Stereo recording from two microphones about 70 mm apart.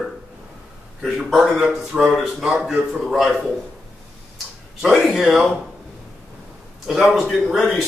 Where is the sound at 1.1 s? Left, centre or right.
Centre.